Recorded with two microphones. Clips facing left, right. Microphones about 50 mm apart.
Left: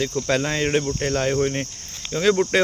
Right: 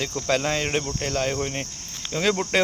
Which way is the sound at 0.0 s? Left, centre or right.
Centre.